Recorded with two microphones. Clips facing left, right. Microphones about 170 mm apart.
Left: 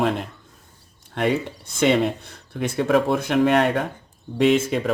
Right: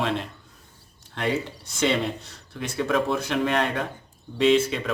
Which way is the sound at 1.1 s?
60° left (ahead or behind).